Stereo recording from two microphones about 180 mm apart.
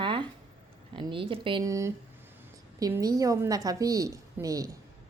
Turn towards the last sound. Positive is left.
turn(degrees=-20)  # may be behind; listen again after turning